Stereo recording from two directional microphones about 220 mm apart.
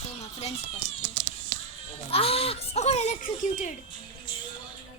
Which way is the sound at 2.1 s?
25° left (ahead or behind).